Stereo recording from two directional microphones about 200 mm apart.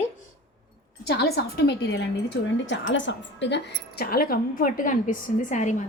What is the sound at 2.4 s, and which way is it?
A woman's voice, 65° left (ahead or behind).